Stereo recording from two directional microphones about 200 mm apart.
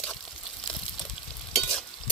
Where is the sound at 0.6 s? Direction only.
Centre (ahead or behind).